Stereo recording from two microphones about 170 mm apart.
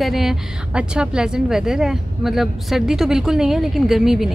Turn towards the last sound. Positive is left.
turn(degrees=0)  # may be behind; listen again after turning